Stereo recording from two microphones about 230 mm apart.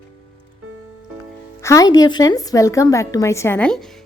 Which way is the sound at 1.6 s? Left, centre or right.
Centre.